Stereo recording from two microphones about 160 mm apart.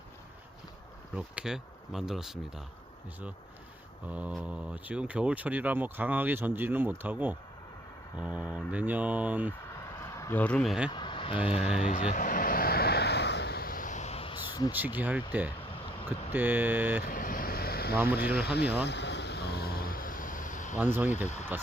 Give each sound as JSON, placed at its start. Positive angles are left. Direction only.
{"t": 1.1, "sound": "speech", "side_deg": -5}
{"t": 4.1, "sound": "speech", "side_deg": -5}
{"t": 10.1, "sound": "speech", "side_deg": 15}
{"t": 10.9, "sound": "vehicle", "side_deg": 30}
{"t": 11.4, "sound": "speech", "side_deg": 40}
{"t": 12.1, "sound": "vehicle", "side_deg": 60}
{"t": 14.7, "sound": "speech", "side_deg": -10}
{"t": 17.1, "sound": "vehicle", "side_deg": 60}
{"t": 17.9, "sound": "speech", "side_deg": -15}
{"t": 18.3, "sound": "speech", "side_deg": 90}
{"t": 18.9, "sound": "vehicle", "side_deg": 90}
{"t": 20.7, "sound": "speech", "side_deg": -10}
{"t": 21.2, "sound": "speech", "side_deg": 45}